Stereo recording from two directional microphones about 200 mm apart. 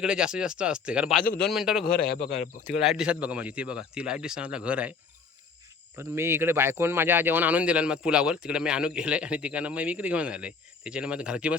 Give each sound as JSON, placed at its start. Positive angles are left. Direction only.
{"t": 0.0, "sound": "speech", "side_deg": -5}
{"t": 1.8, "sound": "speech", "side_deg": 50}
{"t": 2.7, "sound": "speech", "side_deg": -5}
{"t": 6.0, "sound": "speech", "side_deg": -10}